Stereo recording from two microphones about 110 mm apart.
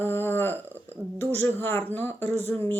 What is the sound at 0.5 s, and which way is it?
Speech, 20° right (ahead or behind).